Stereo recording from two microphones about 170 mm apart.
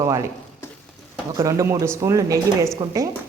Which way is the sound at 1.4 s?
20° right (ahead or behind).